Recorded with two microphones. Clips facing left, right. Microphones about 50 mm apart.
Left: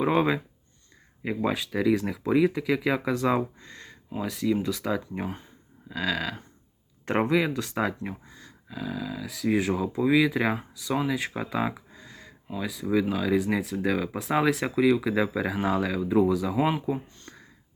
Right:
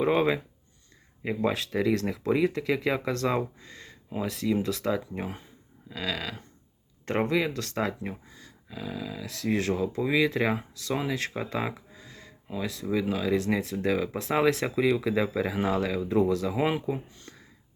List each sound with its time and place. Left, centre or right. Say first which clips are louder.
0.0 s speech: even; centre
7.0 s speech: left 2 dB; centre
7.3 s speech: left 2 dB; centre